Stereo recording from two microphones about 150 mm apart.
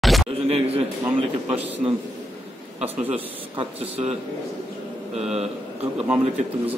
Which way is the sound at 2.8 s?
10° right (ahead or behind).